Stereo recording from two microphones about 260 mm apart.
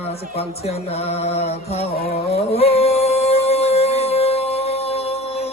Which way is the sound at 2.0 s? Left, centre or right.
Left.